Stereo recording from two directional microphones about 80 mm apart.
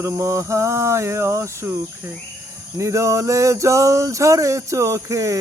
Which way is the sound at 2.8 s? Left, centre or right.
Right.